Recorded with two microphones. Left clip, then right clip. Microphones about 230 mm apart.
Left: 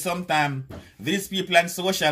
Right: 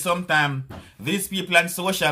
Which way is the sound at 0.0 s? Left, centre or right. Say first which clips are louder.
Right 3 dB; centre.